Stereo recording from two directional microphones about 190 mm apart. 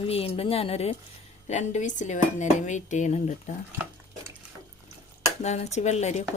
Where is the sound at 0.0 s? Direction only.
30° left (ahead or behind).